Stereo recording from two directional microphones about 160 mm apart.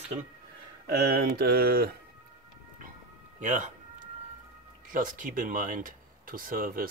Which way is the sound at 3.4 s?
55° right (ahead or behind).